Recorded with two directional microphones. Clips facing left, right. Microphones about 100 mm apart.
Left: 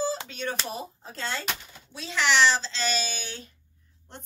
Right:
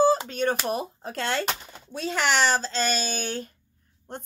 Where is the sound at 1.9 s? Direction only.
50° right (ahead or behind).